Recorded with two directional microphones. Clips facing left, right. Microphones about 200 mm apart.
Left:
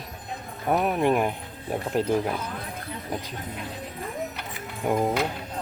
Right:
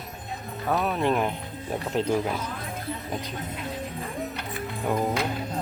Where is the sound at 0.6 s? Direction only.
15° left (ahead or behind).